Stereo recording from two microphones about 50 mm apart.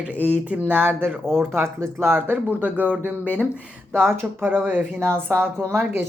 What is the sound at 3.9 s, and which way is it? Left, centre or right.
Speech, right.